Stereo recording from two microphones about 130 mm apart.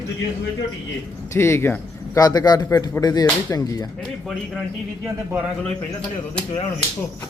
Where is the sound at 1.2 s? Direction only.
20° left (ahead or behind).